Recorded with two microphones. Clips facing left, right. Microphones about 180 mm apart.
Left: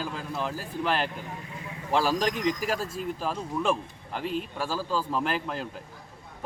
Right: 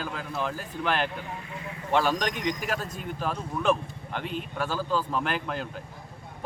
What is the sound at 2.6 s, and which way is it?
Speech, 30° left (ahead or behind).